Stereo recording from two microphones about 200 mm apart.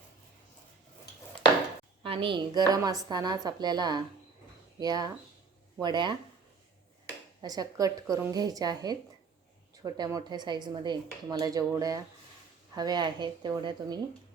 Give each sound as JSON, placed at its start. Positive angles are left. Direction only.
{"t": 2.0, "sound": "speech", "side_deg": -25}
{"t": 7.4, "sound": "speech", "side_deg": -20}